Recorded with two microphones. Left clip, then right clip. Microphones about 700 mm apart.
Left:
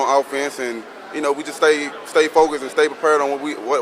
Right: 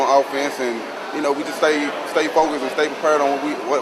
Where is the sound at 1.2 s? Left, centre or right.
Left.